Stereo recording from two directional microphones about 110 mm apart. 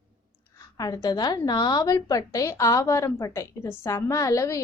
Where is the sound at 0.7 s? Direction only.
35° left (ahead or behind).